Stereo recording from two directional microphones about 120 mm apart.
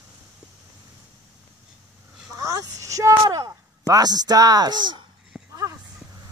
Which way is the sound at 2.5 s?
25° right (ahead or behind).